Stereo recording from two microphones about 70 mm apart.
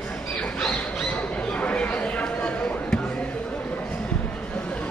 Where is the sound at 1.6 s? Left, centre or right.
Centre.